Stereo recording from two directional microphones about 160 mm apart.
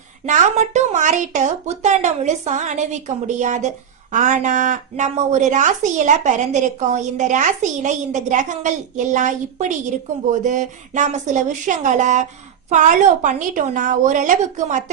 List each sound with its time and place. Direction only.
0.3 s a woman's voice: 50° right (ahead or behind)